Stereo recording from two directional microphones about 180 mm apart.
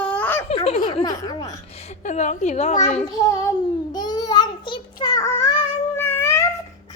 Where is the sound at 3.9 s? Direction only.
25° left (ahead or behind).